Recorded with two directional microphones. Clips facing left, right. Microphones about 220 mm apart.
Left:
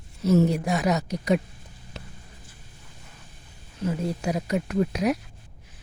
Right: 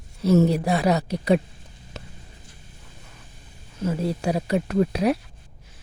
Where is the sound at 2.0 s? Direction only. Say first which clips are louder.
Right 2 dB; 45° right (ahead or behind).